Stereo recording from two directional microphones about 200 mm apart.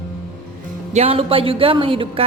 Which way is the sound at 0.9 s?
30° right (ahead or behind).